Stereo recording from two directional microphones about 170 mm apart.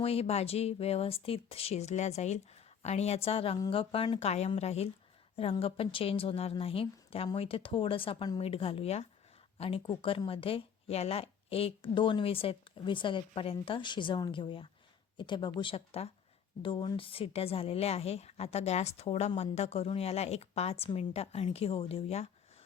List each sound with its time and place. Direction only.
0.0 s a woman's voice: 35° left (ahead or behind)